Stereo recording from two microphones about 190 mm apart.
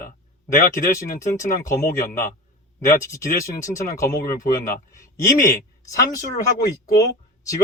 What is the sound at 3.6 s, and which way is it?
Speech, 15° left (ahead or behind).